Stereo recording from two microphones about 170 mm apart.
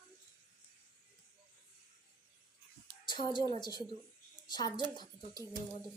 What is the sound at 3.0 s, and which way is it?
A woman's voice, 25° left (ahead or behind).